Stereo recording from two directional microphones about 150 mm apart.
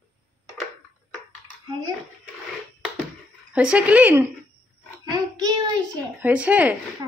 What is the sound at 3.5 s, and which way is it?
Speech, 10° right (ahead or behind).